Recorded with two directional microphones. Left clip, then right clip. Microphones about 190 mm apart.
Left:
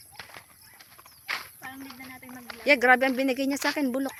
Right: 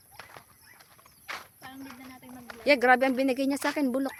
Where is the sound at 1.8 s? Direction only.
Centre (ahead or behind).